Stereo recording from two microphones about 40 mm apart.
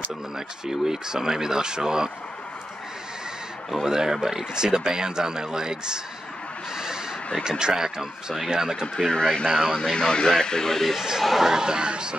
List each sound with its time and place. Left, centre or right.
0.7 s speech: centre
3.7 s speech: centre
7.4 s speech: centre
9.1 s speech: left
9.5 s speech: centre
9.8 s a man's voice: left
11.0 s speech: centre
11.5 s speech: centre